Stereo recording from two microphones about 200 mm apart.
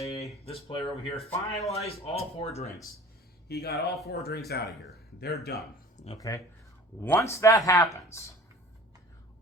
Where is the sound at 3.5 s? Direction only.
50° left (ahead or behind).